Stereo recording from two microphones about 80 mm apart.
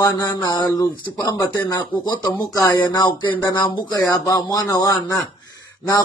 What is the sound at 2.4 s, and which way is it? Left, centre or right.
Speech, left.